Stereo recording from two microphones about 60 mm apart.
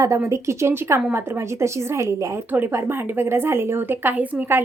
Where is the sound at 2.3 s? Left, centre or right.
Right.